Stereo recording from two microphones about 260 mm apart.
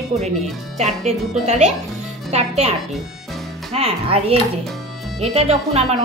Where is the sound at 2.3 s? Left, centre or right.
Right.